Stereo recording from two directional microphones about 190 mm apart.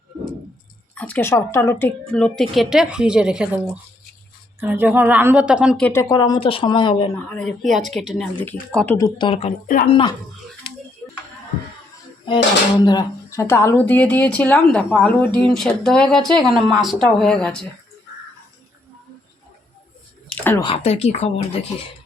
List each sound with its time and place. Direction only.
0.9 s a woman's voice: 10° left (ahead or behind)
5.8 s speech: 15° left (ahead or behind)
7.3 s a woman's voice: 5° left (ahead or behind)
9.0 s speech: 20° left (ahead or behind)
9.6 s speech: 45° left (ahead or behind)
9.9 s speech: 25° left (ahead or behind)
12.8 s a woman's voice: 20° left (ahead or behind); by 17.7 s 5° left (ahead or behind)
20.6 s speech: 30° left (ahead or behind)